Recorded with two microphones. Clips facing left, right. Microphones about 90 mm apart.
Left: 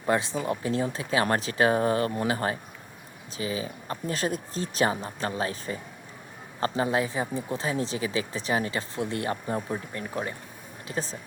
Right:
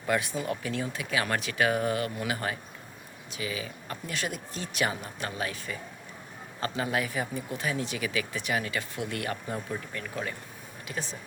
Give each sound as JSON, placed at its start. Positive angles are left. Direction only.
{"t": 0.0, "sound": "speech", "side_deg": 25}